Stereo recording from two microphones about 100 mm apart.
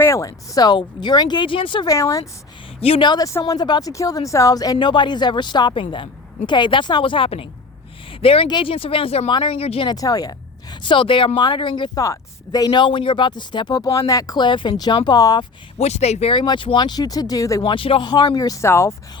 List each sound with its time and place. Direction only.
0.0 s a woman's voice: 30° left (ahead or behind); by 1.9 s 55° left (ahead or behind)
1.9 s speech: 30° left (ahead or behind)
3.0 s a woman's voice: 45° left (ahead or behind)
4.9 s a woman's voice: 50° left (ahead or behind); by 8.4 s 65° left (ahead or behind)
8.4 s speech: 55° left (ahead or behind); by 9.3 s 80° left
9.3 s speech: 60° left (ahead or behind)
9.9 s speech: 40° left (ahead or behind)
10.8 s speech: 60° left (ahead or behind)
11.9 s a woman's voice: 35° left (ahead or behind)
15.8 s speech: 90° left
16.3 s a woman's voice: 50° left (ahead or behind); by 17.6 s 35° left (ahead or behind)
17.6 s speech: 60° left (ahead or behind)
18.3 s speech: 35° left (ahead or behind)